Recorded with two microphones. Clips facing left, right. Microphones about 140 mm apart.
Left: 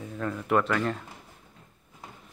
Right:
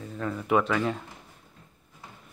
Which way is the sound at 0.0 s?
Centre (ahead or behind).